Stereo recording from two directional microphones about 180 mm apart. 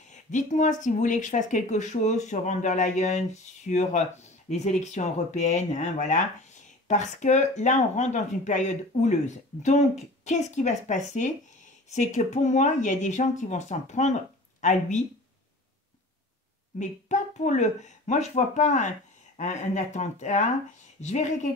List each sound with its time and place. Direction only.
0.1 s speech: 40° left (ahead or behind)
16.7 s speech: 45° left (ahead or behind)